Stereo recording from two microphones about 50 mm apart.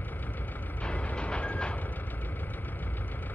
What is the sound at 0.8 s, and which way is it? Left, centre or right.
Train, left.